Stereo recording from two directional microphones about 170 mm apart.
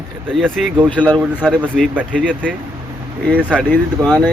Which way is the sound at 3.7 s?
Centre (ahead or behind).